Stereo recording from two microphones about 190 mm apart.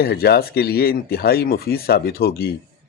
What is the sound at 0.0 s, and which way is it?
Speech, 55° left (ahead or behind).